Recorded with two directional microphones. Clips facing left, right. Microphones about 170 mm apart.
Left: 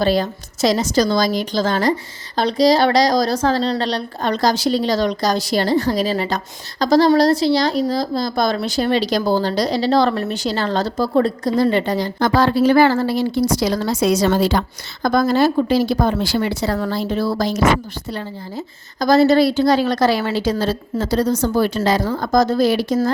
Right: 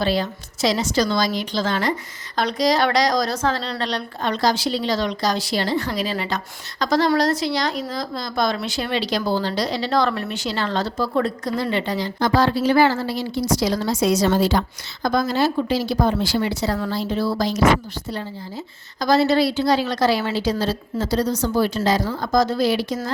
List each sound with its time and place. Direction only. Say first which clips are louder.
0.0 s a woman's voice: left 4 dB; 45° left (ahead or behind); by 14.6 s 65° left (ahead or behind)
15.0 s a woman's voice: left 4 dB; 50° left (ahead or behind)